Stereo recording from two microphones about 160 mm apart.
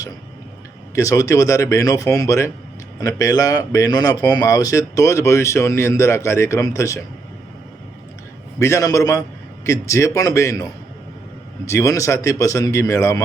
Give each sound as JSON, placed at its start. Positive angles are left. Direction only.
{"t": 0.9, "sound": "a man's voice", "side_deg": 20}
{"t": 8.5, "sound": "a man's voice", "side_deg": 15}